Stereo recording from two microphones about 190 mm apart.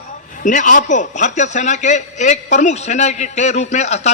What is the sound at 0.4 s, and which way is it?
A man's voice, 40° left (ahead or behind).